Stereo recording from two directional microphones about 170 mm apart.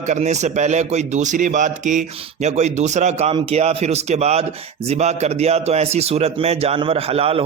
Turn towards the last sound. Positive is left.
turn(degrees=-35)  # may be behind; listen again after turning